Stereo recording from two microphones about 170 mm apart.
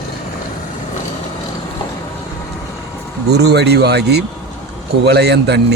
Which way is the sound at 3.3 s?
75° right (ahead or behind).